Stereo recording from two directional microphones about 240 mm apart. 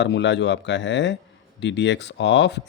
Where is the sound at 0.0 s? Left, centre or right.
Left.